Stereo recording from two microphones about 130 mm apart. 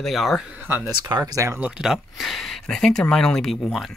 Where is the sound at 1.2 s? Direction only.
20° right (ahead or behind).